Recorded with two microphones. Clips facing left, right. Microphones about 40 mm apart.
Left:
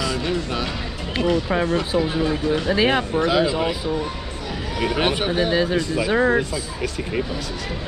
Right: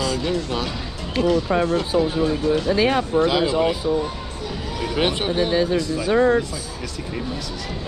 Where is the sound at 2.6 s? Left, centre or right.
Left.